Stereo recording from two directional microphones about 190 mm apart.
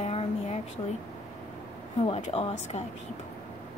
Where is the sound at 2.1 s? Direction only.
30° left (ahead or behind).